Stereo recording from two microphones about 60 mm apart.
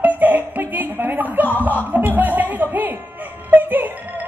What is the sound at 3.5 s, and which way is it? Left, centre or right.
Music, right.